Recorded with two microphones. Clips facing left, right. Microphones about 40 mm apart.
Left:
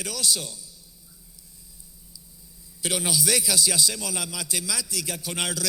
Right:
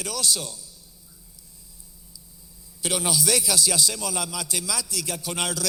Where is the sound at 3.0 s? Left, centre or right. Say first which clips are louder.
Right 1 dB; left.